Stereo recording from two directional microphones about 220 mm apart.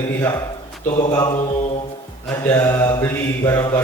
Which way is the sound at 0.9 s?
30° left (ahead or behind).